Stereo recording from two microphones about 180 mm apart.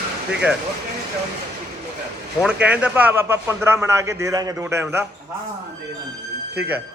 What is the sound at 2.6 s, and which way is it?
A man's voice, 5° right (ahead or behind).